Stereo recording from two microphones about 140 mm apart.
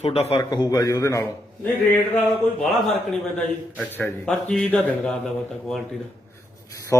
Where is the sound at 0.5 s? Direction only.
30° left (ahead or behind).